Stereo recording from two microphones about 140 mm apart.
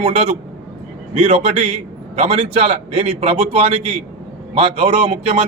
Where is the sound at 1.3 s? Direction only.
45° right (ahead or behind).